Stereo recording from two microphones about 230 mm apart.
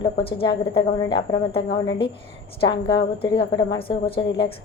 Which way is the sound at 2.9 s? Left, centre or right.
Left.